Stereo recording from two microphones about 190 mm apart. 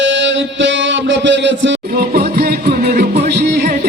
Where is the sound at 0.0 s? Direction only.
70° right (ahead or behind).